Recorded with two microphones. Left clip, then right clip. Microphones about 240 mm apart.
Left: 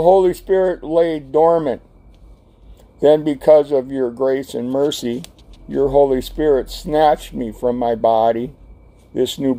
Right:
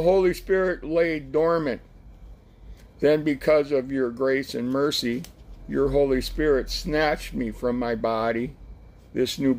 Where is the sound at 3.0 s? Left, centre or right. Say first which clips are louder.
Left 8 dB; left.